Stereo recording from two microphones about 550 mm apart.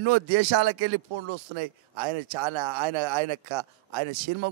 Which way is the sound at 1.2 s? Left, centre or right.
Right.